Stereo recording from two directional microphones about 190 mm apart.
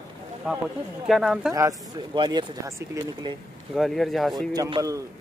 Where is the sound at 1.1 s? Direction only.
Centre (ahead or behind).